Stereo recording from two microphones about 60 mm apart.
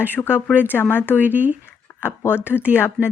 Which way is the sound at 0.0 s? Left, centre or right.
Left.